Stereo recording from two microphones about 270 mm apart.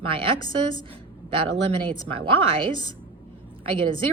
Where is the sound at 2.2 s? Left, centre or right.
Centre.